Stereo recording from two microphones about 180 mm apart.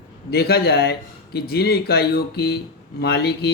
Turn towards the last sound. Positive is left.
turn(degrees=65)  # may be behind; listen again after turning